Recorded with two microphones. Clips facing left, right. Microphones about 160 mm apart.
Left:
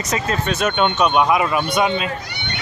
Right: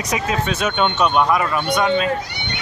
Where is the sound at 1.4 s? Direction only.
15° left (ahead or behind).